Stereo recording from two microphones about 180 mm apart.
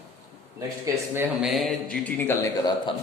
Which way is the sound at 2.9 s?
25° left (ahead or behind).